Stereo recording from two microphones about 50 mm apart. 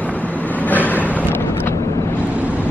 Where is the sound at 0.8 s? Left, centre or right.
Left.